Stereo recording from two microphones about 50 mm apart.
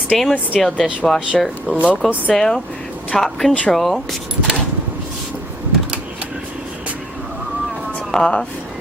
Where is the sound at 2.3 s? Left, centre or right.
Centre.